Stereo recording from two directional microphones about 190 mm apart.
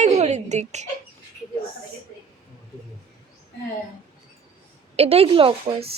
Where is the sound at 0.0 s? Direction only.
35° right (ahead or behind).